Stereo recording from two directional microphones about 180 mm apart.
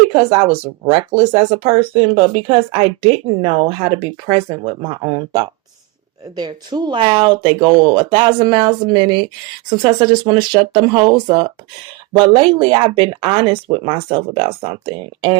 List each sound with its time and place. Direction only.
0.1 s a woman's voice: 30° right (ahead or behind)